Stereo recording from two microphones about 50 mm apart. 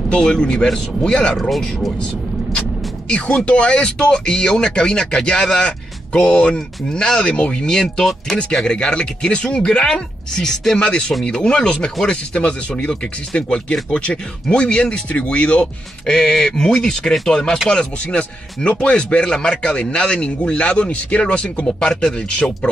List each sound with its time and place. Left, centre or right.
0.2 s speech: centre
3.1 s speech: centre
8.4 s speech: centre